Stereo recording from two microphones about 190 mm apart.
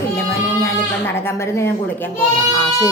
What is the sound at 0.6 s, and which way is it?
Speech, 10° left (ahead or behind).